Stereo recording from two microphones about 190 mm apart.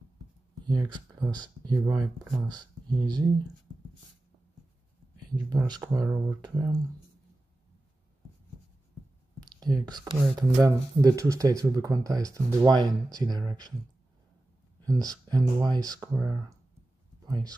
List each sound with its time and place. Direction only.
0.7 s speech: 20° right (ahead or behind)
5.3 s speech: 20° right (ahead or behind)
9.4 s speech: 20° right (ahead or behind)
14.9 s speech: 20° right (ahead or behind)